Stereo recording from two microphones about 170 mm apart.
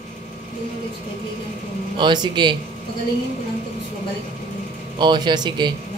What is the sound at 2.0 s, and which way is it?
Speech, 25° right (ahead or behind).